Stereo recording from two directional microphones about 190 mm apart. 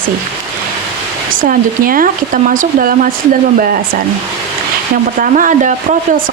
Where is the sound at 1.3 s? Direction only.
45° right (ahead or behind).